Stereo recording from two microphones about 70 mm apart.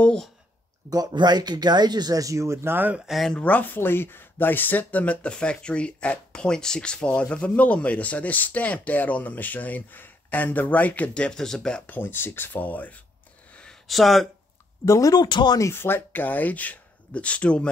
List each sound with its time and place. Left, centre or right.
0.8 s speech: right
3.1 s speech: centre
3.3 s speech: left
11.2 s speech: centre
11.9 s speech: left
13.8 s speech: centre
14.9 s speech: left
15.1 s speech: left
15.7 s speech: left; by 17.6 s centre